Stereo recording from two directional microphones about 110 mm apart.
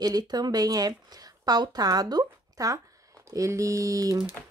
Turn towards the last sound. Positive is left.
turn(degrees=-30)  # may be behind; listen again after turning